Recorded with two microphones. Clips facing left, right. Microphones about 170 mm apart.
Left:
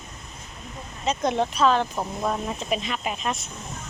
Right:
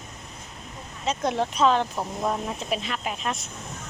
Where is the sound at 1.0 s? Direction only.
5° right (ahead or behind).